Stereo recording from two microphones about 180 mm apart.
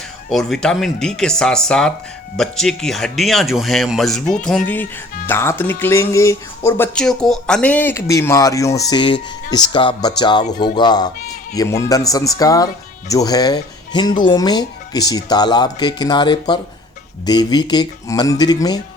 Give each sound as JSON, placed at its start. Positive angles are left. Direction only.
{"t": 0.3, "sound": "speech", "side_deg": 0}
{"t": 5.3, "sound": "music", "side_deg": 15}
{"t": 9.7, "sound": "speech", "side_deg": 25}